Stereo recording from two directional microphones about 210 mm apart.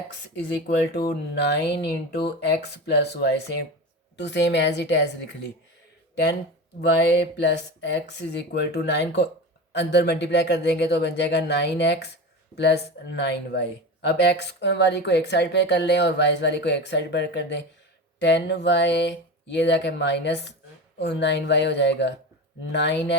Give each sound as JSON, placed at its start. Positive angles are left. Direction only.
{"t": 0.1, "sound": "speech", "side_deg": 50}
{"t": 7.0, "sound": "speech", "side_deg": 55}